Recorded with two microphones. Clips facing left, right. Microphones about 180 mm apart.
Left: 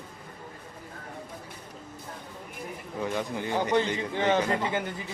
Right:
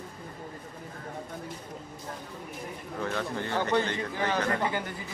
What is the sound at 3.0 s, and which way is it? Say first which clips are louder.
Speech: left 1 dB; 15° left (ahead or behind).